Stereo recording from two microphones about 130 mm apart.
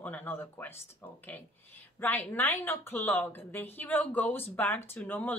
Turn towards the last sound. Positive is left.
turn(degrees=15)  # may be behind; listen again after turning